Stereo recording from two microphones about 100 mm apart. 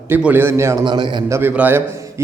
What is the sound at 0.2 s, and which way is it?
A man's voice, 20° right (ahead or behind).